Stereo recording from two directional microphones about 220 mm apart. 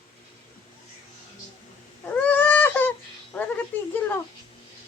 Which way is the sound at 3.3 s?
10° left (ahead or behind).